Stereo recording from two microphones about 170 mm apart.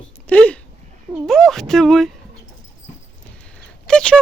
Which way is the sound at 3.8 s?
5° left (ahead or behind).